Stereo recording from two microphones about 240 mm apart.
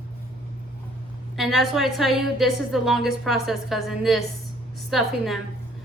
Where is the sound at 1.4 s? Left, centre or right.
Centre.